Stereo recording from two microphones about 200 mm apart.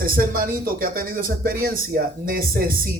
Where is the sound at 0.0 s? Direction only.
45° right (ahead or behind).